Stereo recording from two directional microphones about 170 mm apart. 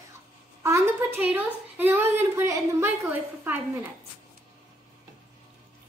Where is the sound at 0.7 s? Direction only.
15° right (ahead or behind).